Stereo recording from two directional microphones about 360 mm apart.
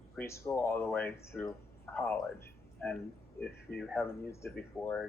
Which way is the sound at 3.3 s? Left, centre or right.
Left.